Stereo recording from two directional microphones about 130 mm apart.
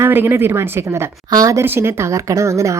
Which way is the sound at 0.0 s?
15° right (ahead or behind).